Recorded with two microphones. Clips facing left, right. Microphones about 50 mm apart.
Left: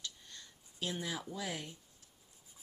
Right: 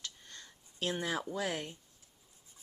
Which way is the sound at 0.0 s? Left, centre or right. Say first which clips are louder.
Right 1 dB; right.